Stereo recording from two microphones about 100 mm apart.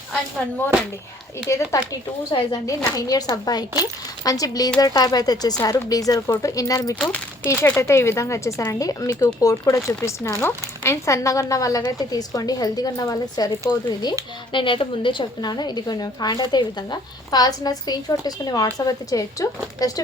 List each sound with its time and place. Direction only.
1.5 s speech: 30° left (ahead or behind)
14.5 s a woman's voice: 60° left (ahead or behind); by 19.9 s 35° left (ahead or behind)